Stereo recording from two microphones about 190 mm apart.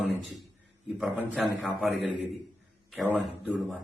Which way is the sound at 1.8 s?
5° right (ahead or behind).